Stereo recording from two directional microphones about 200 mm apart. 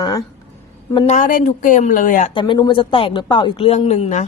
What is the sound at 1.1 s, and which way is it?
Speech, 45° left (ahead or behind).